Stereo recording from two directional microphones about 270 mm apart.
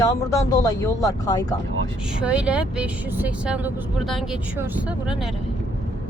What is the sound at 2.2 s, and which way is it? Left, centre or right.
Speech, centre.